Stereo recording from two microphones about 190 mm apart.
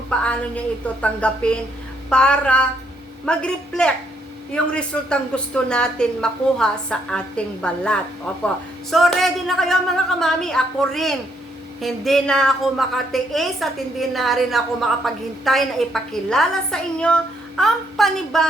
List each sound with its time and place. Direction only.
0.1 s a woman's voice: 5° left (ahead or behind)